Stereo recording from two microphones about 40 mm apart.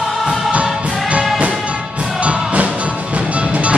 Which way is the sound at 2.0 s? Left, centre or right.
Right.